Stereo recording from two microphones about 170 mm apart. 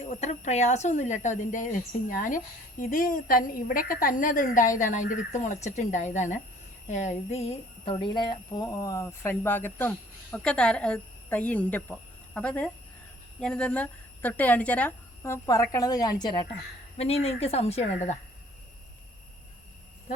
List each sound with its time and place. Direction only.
0.1 s a woman's voice: 40° left (ahead or behind); by 16.5 s 25° left (ahead or behind)
17.0 s a woman's voice: 35° left (ahead or behind)